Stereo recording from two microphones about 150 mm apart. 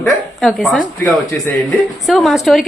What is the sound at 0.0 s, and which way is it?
Speech, centre (ahead or behind).